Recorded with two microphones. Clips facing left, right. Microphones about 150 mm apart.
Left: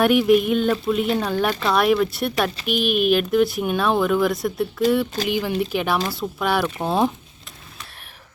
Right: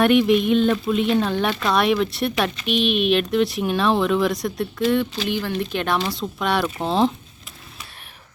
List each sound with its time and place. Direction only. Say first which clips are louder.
0.0 s speech: even; centre (ahead or behind)